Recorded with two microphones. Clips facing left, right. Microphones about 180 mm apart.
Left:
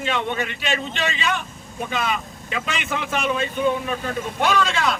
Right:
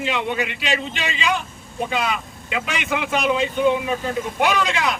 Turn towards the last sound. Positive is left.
turn(degrees=-15)  # may be behind; listen again after turning